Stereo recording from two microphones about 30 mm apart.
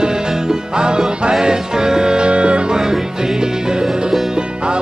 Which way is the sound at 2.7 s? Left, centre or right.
Centre.